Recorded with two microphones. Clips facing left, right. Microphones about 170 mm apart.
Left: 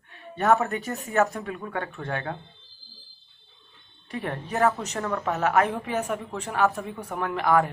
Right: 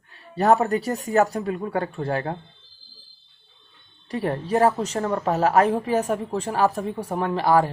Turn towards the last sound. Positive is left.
turn(degrees=-30)  # may be behind; listen again after turning